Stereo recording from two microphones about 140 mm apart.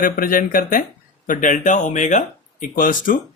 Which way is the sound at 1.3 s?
65° left (ahead or behind).